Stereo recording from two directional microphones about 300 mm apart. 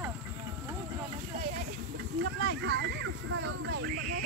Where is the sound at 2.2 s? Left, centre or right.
Right.